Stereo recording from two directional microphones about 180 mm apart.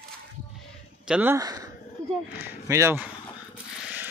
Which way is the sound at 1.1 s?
10° right (ahead or behind).